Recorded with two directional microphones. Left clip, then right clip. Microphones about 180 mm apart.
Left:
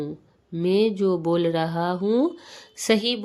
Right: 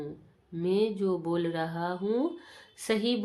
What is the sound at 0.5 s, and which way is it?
Speech, 40° left (ahead or behind).